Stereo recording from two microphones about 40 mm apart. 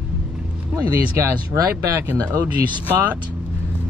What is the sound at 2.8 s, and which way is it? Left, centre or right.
Speech, right.